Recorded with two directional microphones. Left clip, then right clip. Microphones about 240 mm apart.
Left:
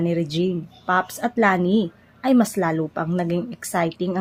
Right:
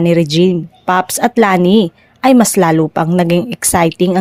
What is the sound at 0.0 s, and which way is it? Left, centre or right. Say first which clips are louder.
A woman's voice: right 12 dB; right.